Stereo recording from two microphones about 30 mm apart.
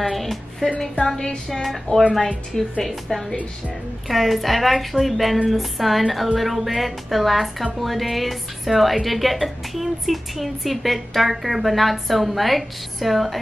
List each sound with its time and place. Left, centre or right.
0.0 s music: centre
1.0 s music: centre
1.5 s a woman's voice: centre